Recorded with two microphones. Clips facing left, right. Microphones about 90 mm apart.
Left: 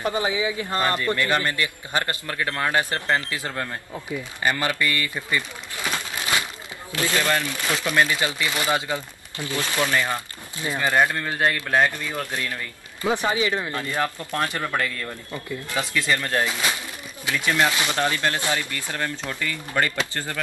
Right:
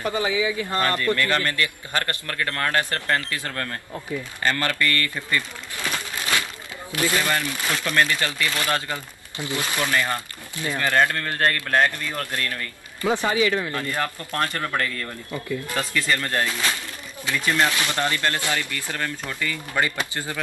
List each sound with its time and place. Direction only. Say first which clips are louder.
0.0 s a man's voice: even; 25° left (ahead or behind)
6.3 s crumpling: even; 20° left (ahead or behind)
7.2 s speech: left 1 dB; 5° left (ahead or behind)
9.4 s speech: even; 20° right (ahead or behind)
9.8 s speech: even; 5° left (ahead or behind)
10.6 s a man's voice: even; 20° left (ahead or behind)
13.9 s speech: left 2 dB; 5° left (ahead or behind)
17.4 s speech: even; 5° left (ahead or behind)
17.6 s speech: left 1 dB; 20° left (ahead or behind)
19.7 s speech: left 1 dB; 10° right (ahead or behind)